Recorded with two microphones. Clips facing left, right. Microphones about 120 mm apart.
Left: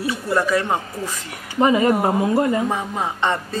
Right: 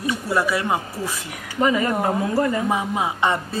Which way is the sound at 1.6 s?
25° left (ahead or behind).